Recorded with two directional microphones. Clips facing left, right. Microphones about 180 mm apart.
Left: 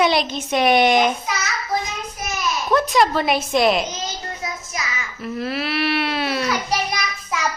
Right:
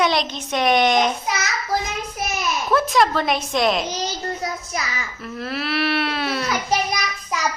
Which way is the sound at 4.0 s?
35° right (ahead or behind).